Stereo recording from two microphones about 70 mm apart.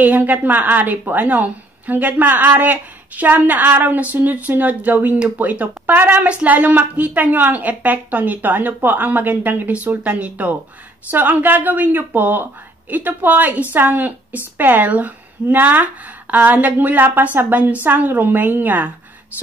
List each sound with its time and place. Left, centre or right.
0.0 s a woman's voice: right